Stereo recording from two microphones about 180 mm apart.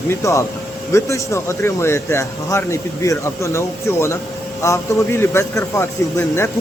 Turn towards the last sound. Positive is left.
turn(degrees=15)  # may be behind; listen again after turning